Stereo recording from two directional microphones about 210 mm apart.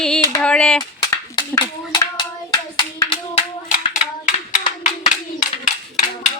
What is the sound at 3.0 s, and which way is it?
Hands, 35° left (ahead or behind).